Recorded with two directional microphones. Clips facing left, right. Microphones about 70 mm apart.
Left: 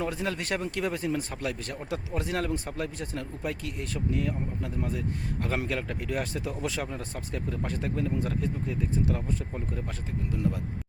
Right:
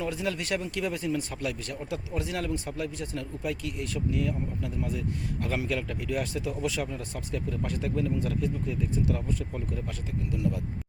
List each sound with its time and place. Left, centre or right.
0.0 s speech: left